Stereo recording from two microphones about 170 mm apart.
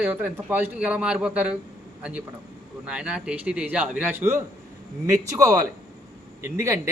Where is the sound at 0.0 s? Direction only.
10° right (ahead or behind).